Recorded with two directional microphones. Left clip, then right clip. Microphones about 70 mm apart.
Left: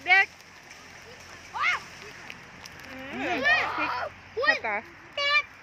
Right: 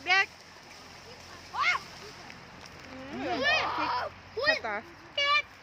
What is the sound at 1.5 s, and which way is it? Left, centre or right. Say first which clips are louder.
Splash: left 1 dB; centre.